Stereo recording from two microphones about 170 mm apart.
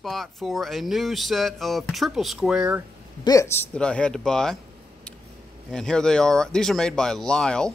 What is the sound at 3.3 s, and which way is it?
Speech, 15° left (ahead or behind).